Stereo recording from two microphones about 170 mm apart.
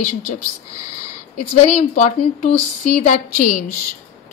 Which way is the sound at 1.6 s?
45° left (ahead or behind).